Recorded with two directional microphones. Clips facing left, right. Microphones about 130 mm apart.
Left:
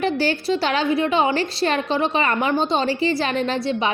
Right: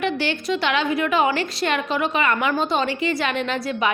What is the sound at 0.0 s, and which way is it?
A woman's voice, 35° left (ahead or behind).